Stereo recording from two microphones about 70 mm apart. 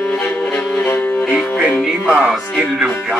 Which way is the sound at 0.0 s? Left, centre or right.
Left.